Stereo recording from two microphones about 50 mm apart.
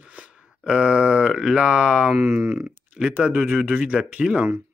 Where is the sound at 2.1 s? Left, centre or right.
Right.